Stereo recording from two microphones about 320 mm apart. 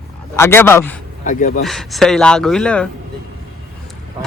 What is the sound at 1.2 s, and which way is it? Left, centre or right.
Speech, left.